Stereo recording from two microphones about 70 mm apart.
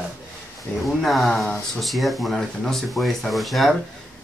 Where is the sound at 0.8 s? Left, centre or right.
Centre.